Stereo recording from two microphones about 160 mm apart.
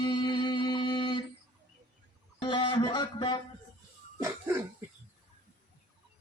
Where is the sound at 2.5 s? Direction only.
30° left (ahead or behind).